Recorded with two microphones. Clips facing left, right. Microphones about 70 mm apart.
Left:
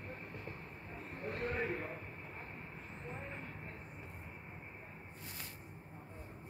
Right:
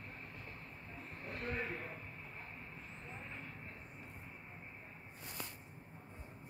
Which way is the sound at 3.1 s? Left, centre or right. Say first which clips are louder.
Left 4 dB; centre.